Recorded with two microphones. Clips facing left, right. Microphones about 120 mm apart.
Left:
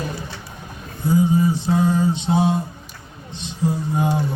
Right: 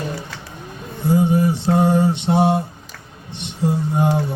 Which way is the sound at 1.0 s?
70° right (ahead or behind).